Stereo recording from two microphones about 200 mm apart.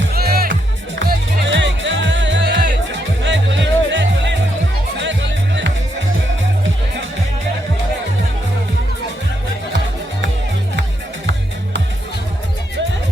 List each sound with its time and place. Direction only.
0.0 s music: 50° right (ahead or behind)
1.5 s music: 65° right (ahead or behind)